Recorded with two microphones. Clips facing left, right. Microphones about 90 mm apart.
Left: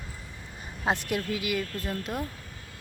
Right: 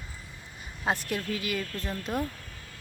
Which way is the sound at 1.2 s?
10° left (ahead or behind).